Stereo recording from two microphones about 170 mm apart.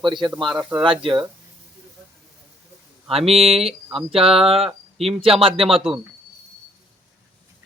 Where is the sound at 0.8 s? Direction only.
30° right (ahead or behind).